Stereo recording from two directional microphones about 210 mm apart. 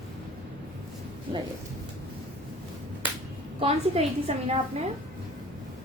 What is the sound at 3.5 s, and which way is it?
A woman's voice, 30° right (ahead or behind).